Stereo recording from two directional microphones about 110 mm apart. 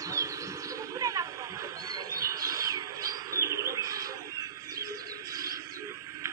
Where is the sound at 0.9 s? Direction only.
35° right (ahead or behind).